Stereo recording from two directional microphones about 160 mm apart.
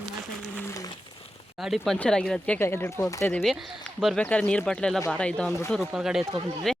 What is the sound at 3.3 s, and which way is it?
Speech, centre (ahead or behind).